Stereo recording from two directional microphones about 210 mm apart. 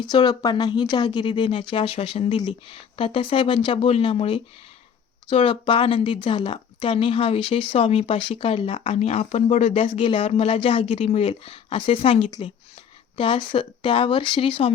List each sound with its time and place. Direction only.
0.0 s speech: 20° left (ahead or behind)